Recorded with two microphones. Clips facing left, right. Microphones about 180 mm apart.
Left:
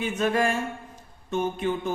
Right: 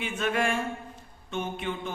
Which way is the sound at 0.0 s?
40° left (ahead or behind).